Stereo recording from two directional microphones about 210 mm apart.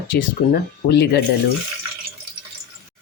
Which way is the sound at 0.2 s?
50° left (ahead or behind).